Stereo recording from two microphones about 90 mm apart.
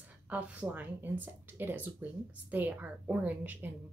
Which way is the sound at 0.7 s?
20° right (ahead or behind).